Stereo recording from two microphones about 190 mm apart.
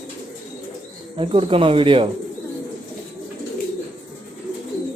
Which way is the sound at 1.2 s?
30° right (ahead or behind).